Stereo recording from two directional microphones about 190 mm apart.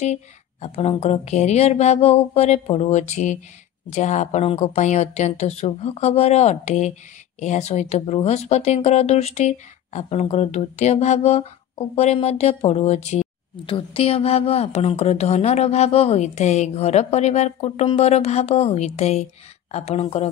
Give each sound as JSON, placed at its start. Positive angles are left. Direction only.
{"t": 0.0, "sound": "speech", "side_deg": 35}